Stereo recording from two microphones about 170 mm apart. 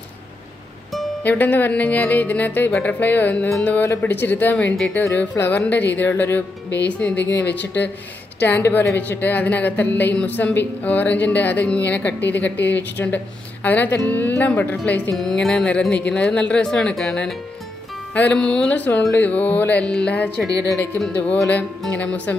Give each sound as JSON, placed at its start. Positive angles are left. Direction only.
{"t": 1.2, "sound": "a woman's voice", "side_deg": 10}